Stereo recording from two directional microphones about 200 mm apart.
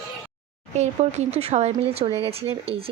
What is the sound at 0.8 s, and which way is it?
A woman's voice, 35° right (ahead or behind).